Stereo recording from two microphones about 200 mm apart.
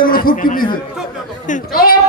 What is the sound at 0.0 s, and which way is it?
A man's voice, 45° left (ahead or behind).